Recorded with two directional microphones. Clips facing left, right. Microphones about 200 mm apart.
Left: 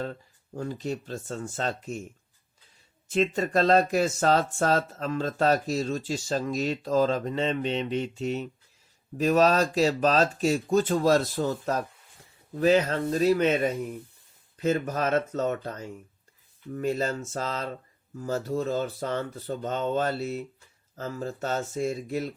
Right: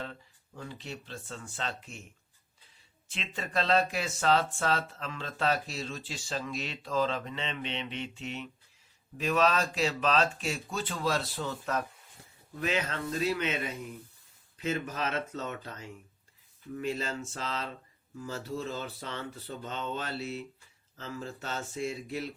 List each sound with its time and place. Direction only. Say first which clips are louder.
0.0 s speech: left 8 dB; 45° left (ahead or behind)
3.1 s speech: left 14 dB; 45° left (ahead or behind)